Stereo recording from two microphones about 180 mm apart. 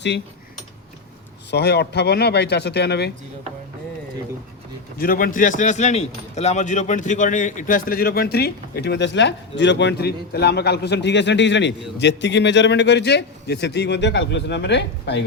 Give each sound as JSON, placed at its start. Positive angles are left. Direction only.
{"t": 1.5, "sound": "speech", "side_deg": 65}
{"t": 4.9, "sound": "speech", "side_deg": 50}